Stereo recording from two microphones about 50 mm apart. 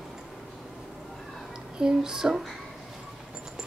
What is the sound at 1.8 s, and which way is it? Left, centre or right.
Speech, centre.